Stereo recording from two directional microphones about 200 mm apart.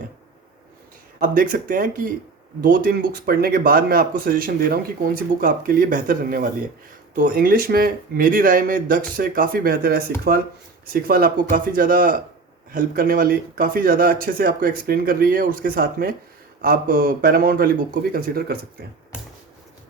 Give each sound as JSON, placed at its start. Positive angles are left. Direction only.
{"t": 1.2, "sound": "speech", "side_deg": -45}